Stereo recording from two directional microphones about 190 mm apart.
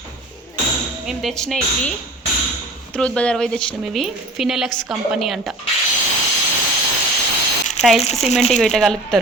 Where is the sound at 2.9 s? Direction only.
5° left (ahead or behind).